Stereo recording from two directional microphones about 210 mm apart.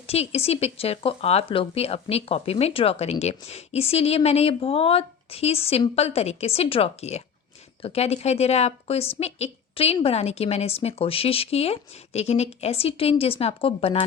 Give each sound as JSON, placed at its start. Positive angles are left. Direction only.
{"t": 0.1, "sound": "speech", "side_deg": 30}